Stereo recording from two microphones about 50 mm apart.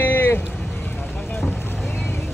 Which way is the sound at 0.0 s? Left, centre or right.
Left.